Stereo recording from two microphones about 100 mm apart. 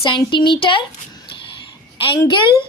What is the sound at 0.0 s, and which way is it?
Speech, 50° left (ahead or behind).